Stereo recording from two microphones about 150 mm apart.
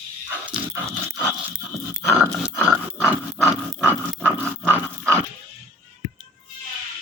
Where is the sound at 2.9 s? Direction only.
10° right (ahead or behind).